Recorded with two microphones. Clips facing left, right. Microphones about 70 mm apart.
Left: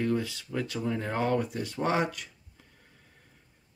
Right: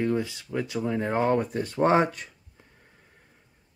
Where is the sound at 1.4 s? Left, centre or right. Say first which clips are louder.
Right 6 dB; right.